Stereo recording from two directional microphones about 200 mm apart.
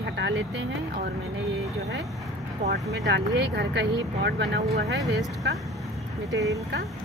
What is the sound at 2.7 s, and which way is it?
Speech, 55° right (ahead or behind).